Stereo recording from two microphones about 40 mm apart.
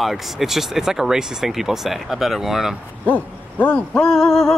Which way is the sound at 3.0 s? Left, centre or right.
Left.